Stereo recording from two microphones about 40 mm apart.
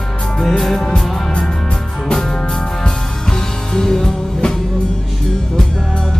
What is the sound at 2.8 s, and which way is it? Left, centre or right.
Music, centre.